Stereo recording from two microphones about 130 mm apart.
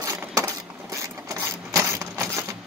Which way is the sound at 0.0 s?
25° right (ahead or behind).